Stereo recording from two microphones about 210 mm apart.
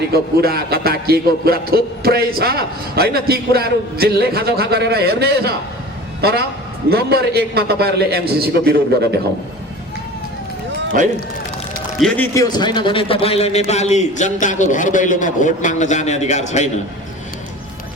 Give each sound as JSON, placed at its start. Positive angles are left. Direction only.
{"t": 0.1, "sound": "music", "side_deg": -45}
{"t": 6.9, "sound": "music", "side_deg": -50}
{"t": 11.9, "sound": "a man's voice", "side_deg": 5}